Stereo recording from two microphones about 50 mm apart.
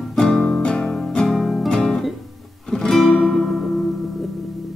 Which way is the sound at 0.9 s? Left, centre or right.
Centre.